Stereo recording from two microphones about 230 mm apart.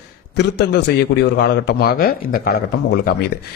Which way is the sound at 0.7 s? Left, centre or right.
Left.